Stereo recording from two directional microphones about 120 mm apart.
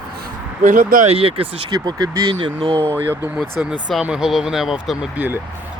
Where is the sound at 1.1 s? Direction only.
50° right (ahead or behind).